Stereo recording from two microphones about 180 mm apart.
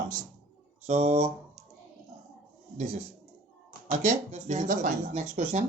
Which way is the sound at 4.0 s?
40° right (ahead or behind).